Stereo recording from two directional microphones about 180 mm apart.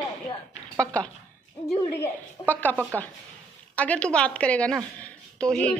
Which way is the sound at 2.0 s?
10° left (ahead or behind).